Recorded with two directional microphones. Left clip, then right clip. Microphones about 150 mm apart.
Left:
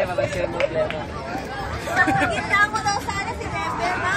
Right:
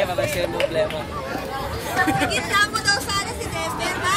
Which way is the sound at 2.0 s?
40° right (ahead or behind).